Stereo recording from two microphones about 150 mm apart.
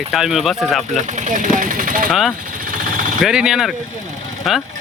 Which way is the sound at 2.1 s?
Centre (ahead or behind).